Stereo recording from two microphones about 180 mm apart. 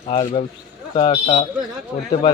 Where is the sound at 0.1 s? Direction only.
30° left (ahead or behind).